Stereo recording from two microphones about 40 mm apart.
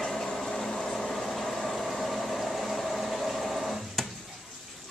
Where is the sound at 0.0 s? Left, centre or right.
Centre.